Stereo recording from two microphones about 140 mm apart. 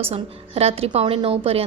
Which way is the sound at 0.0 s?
45° right (ahead or behind).